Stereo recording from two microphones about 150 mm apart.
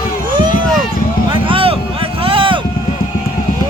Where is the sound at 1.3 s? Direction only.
35° right (ahead or behind).